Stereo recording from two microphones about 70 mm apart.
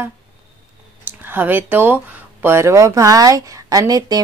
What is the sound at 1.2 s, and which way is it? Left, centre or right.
Speech, right.